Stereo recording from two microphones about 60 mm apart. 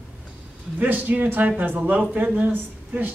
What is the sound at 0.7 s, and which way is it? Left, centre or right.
Speech, right.